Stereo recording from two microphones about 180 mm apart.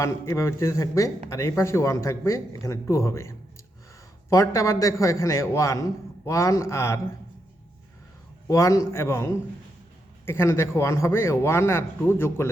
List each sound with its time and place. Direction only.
0.0 s a man's voice: 15° left (ahead or behind)
8.4 s a man's voice: 15° left (ahead or behind)